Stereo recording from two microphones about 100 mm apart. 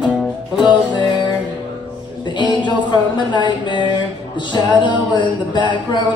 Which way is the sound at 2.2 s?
50° left (ahead or behind).